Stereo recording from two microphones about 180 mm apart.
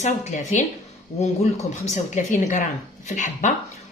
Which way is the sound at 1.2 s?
40° left (ahead or behind).